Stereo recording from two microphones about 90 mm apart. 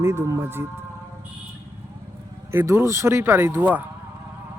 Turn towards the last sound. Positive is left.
turn(degrees=-20)  # may be behind; listen again after turning